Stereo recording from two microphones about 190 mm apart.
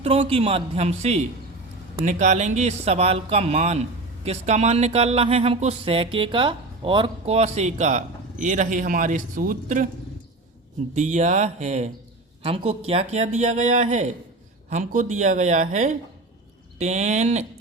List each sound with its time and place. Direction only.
0.0 s speech: 35° right (ahead or behind)
10.9 s speech: 40° right (ahead or behind)